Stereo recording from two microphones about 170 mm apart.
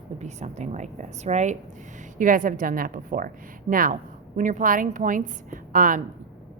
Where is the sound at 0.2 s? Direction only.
45° right (ahead or behind).